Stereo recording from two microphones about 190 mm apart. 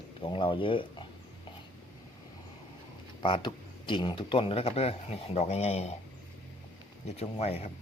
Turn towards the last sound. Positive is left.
turn(degrees=35)  # may be behind; listen again after turning